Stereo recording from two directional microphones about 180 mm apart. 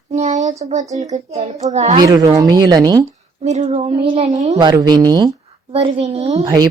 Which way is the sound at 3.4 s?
40° right (ahead or behind).